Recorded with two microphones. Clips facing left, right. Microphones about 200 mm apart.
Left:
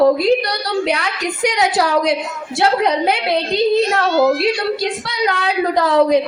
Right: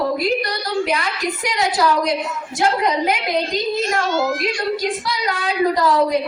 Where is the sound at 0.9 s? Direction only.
70° left (ahead or behind).